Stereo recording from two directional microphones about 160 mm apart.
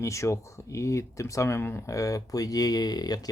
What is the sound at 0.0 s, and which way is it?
Speech, 20° left (ahead or behind).